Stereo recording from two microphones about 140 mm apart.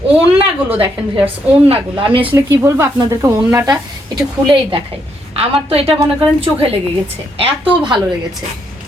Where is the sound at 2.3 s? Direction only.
20° right (ahead or behind).